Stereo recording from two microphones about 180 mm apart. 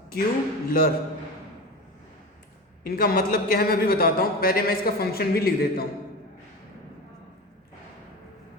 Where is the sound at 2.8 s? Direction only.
55° left (ahead or behind).